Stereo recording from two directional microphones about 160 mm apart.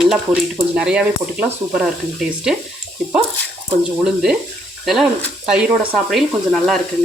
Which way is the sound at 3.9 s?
5° right (ahead or behind).